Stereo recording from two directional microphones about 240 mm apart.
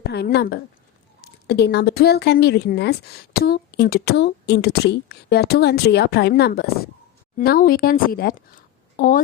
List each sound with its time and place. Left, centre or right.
0.1 s a woman's voice: left